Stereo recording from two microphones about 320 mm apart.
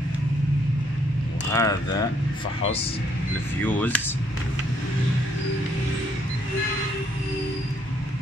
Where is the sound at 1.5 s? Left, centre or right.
Centre.